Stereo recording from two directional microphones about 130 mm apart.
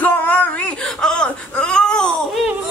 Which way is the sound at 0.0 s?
15° left (ahead or behind).